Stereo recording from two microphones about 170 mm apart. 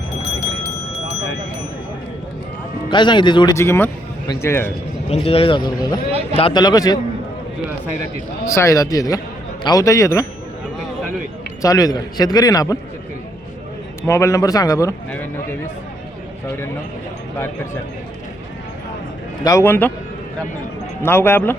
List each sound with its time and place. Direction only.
2.9 s a man's voice: 25° left (ahead or behind)
5.1 s speech: 35° left (ahead or behind)
8.4 s speech: 20° left (ahead or behind)
11.6 s speech: 20° left (ahead or behind)
14.1 s a man's voice: 15° left (ahead or behind)
19.5 s a man's voice: 15° left (ahead or behind)
21.0 s a man's voice: 15° left (ahead or behind)